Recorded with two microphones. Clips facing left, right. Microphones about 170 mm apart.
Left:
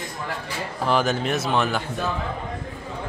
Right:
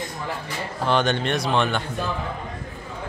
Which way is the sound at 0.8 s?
5° left (ahead or behind).